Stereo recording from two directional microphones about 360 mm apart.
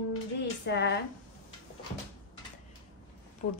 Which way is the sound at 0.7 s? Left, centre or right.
Left.